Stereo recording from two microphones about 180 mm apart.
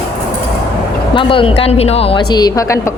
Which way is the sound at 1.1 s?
30° left (ahead or behind).